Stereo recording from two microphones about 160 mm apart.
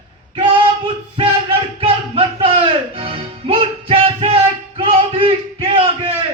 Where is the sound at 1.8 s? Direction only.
35° right (ahead or behind).